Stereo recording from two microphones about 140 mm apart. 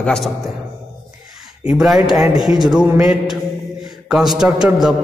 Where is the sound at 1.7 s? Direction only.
Centre (ahead or behind).